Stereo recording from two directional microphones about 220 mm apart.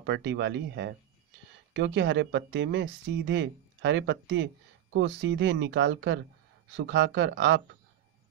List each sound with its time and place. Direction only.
0.0 s speech: 50° right (ahead or behind)